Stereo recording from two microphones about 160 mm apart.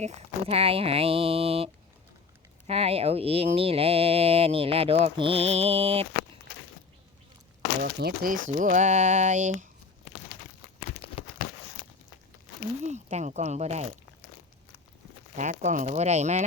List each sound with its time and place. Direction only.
0.0 s speech: 40° right (ahead or behind)
7.8 s speech: 70° right (ahead or behind); by 9.6 s 50° right (ahead or behind)
11.0 s a sound: 35° left (ahead or behind)
12.8 s speech: 45° right (ahead or behind)
15.4 s speech: 50° right (ahead or behind)